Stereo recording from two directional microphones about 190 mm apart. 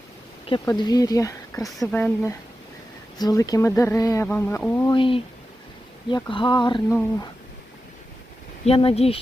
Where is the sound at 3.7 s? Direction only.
15° left (ahead or behind).